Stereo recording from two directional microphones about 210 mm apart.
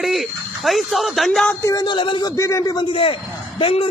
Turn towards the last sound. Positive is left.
turn(degrees=25)  # may be behind; listen again after turning